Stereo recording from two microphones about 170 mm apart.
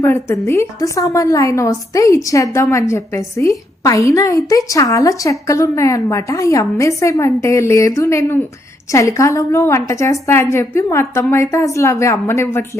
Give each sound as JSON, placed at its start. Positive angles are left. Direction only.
{"t": 0.0, "sound": "a woman's voice", "side_deg": 15}